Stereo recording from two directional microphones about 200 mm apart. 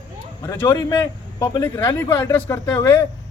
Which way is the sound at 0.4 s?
10° left (ahead or behind).